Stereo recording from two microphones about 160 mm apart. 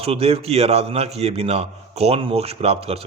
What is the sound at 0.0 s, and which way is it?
Speech, 40° right (ahead or behind).